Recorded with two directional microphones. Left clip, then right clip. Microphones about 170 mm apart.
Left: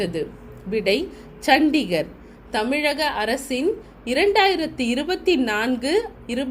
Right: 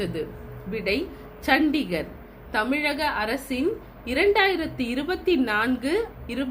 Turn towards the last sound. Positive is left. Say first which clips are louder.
# left 4 dB
turn(degrees=50)  # may be behind; listen again after turning